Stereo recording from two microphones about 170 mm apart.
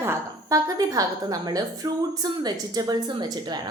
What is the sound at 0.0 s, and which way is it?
A woman's voice, 15° right (ahead or behind).